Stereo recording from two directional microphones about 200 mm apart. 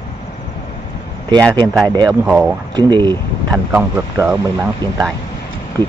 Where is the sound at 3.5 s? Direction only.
10° right (ahead or behind).